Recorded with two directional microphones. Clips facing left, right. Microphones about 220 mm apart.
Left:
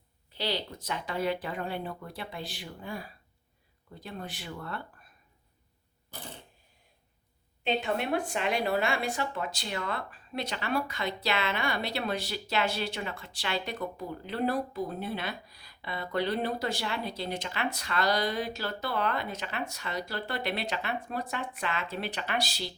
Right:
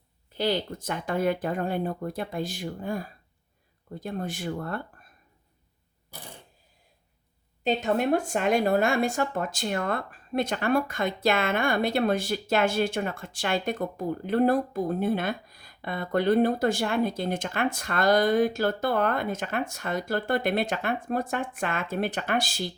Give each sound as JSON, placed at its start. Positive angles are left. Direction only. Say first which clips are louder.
{"t": 0.3, "sound": "speech", "louder": "right 7 dB", "side_deg": -50}
{"t": 7.6, "sound": "speech", "louder": "right 5 dB", "side_deg": -40}